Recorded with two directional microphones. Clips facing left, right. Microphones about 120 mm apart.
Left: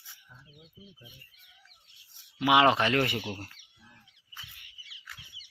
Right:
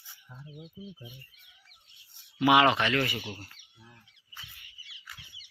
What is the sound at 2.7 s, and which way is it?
Speech, 35° left (ahead or behind).